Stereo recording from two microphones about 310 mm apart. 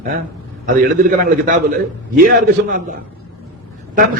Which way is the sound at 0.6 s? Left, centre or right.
Right.